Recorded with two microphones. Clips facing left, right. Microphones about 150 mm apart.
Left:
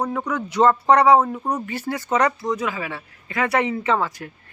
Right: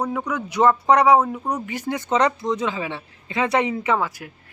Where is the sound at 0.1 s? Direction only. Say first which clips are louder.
Left 1 dB; 10° right (ahead or behind).